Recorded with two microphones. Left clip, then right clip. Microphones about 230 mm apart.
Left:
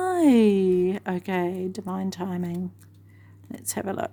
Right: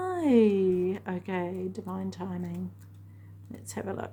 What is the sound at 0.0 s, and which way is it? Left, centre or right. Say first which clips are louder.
A woman's voice: left 4 dB; left.